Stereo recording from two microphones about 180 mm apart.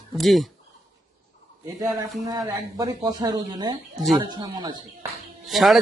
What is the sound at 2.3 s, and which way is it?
Speech, 20° right (ahead or behind).